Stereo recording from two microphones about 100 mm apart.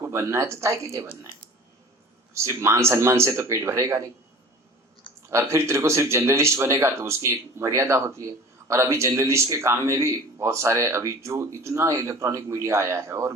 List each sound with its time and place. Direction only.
0.0 s a man's voice: 30° right (ahead or behind)
2.3 s a man's voice: 30° right (ahead or behind)
5.3 s a man's voice: 30° right (ahead or behind)